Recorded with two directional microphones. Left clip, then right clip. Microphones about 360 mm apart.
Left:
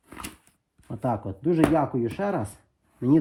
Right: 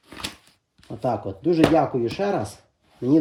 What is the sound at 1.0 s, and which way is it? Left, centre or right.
Speech, left.